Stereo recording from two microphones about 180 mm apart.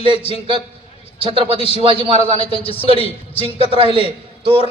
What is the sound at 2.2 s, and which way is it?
A man's voice, 35° left (ahead or behind).